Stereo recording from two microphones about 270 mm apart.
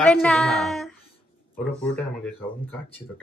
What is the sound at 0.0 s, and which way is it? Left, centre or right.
Speech, centre.